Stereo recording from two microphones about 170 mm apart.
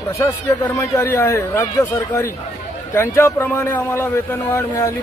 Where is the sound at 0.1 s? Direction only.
20° left (ahead or behind).